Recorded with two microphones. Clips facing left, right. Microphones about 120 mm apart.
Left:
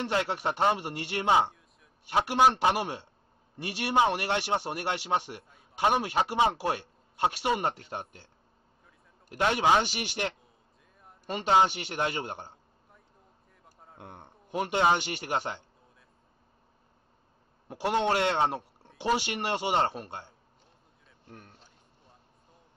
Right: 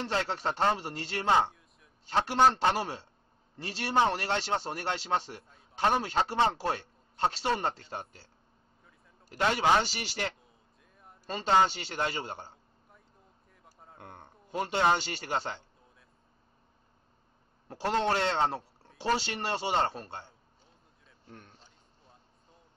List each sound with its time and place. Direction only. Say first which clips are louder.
0.0 s a man's voice: left 2 dB; 15° left (ahead or behind)
9.3 s a man's voice: left 1 dB; 15° left (ahead or behind)
13.9 s a man's voice: left 2 dB; 20° left (ahead or behind)
17.6 s a man's voice: left 2 dB; 15° left (ahead or behind)
21.3 s a sound: left 1 dB; 5° left (ahead or behind)